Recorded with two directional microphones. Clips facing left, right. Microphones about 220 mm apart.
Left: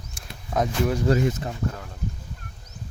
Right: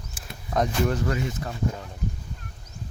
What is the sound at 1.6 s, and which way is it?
Speech, 15° right (ahead or behind).